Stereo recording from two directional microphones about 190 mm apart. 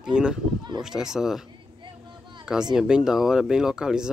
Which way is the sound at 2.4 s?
5° right (ahead or behind).